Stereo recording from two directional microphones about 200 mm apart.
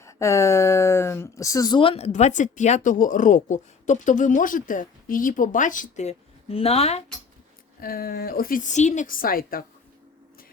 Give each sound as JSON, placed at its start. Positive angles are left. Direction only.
{"t": 0.0, "sound": "speech", "side_deg": 15}
{"t": 7.8, "sound": "a woman's voice", "side_deg": 45}